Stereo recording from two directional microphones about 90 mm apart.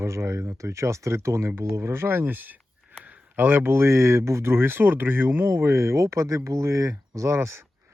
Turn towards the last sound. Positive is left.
turn(degrees=-30)  # may be behind; listen again after turning